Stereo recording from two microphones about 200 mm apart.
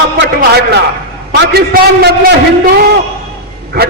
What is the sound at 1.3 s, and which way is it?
Speech, 50° right (ahead or behind).